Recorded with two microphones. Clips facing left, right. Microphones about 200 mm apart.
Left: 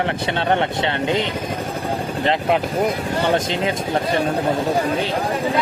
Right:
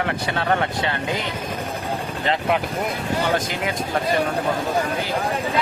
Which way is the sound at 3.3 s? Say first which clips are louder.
Left 4 dB; 25° left (ahead or behind).